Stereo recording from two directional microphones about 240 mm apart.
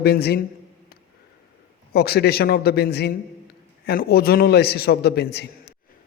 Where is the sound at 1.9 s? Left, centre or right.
Left.